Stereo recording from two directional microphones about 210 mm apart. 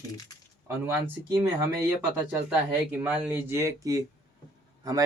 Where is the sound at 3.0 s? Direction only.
10° right (ahead or behind).